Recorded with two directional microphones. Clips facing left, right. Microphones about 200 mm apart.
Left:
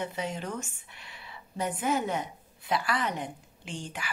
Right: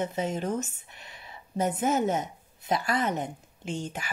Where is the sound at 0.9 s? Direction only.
45° right (ahead or behind).